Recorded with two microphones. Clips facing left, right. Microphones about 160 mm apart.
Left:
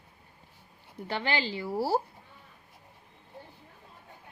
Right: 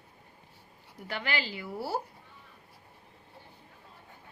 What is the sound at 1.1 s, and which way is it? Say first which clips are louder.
Speech: left 4 dB; 30° left (ahead or behind).